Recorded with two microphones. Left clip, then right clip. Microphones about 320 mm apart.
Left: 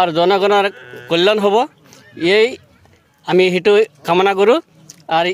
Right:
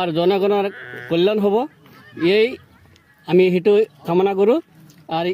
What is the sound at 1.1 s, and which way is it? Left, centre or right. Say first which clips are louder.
A man's voice: left 4 dB; left.